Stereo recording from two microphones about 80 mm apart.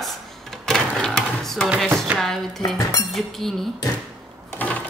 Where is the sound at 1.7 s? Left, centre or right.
Centre.